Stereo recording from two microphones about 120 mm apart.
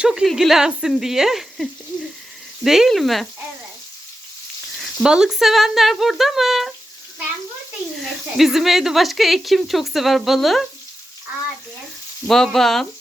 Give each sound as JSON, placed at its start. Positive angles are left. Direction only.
{"t": 0.0, "sound": "a woman's voice", "side_deg": -5}
{"t": 4.8, "sound": "a woman's voice", "side_deg": -5}
{"t": 8.4, "sound": "a woman's voice", "side_deg": 0}
{"t": 12.3, "sound": "a woman's voice", "side_deg": 5}